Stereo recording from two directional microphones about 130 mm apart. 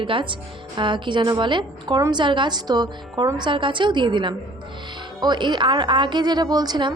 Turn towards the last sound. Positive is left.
turn(degrees=-35)  # may be behind; listen again after turning